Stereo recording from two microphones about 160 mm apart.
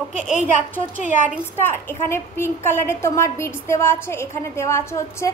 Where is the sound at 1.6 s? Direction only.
15° left (ahead or behind).